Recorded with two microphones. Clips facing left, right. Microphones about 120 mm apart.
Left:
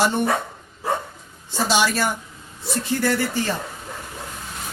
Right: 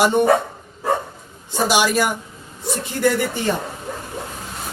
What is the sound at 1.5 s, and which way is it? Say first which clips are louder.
Speech: right 3 dB; 15° right (ahead or behind).